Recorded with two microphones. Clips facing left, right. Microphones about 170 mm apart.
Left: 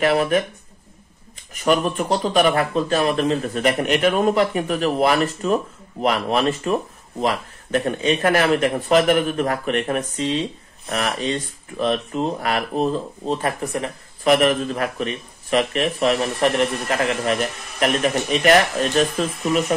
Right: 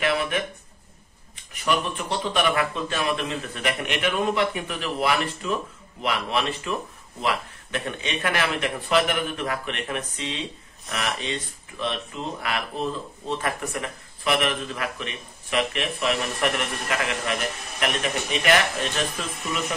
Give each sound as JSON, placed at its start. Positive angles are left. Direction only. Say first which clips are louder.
{"t": 0.0, "sound": "speech", "louder": "left 7 dB", "side_deg": 40}
{"t": 1.5, "sound": "speech", "louder": "left 6 dB", "side_deg": 40}